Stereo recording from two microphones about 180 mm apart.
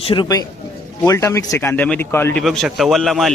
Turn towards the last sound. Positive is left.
turn(degrees=0)  # may be behind; listen again after turning